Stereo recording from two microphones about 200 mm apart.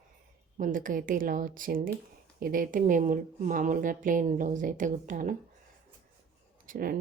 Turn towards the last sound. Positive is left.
turn(degrees=-45)  # may be behind; listen again after turning